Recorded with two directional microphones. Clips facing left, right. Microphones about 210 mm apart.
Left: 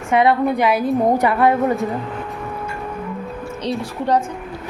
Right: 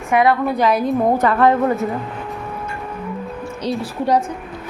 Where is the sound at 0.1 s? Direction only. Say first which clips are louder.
Even; 25° left (ahead or behind).